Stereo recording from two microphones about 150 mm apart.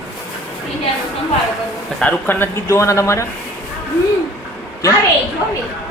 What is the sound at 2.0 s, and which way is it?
Speech, 10° left (ahead or behind).